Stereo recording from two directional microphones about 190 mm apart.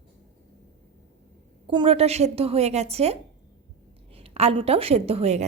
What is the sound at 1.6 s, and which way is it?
A woman's voice, 25° right (ahead or behind).